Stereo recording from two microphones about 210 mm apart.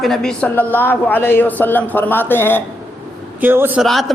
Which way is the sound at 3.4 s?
10° right (ahead or behind).